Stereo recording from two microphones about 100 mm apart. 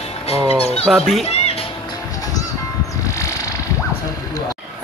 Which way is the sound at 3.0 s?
30° left (ahead or behind).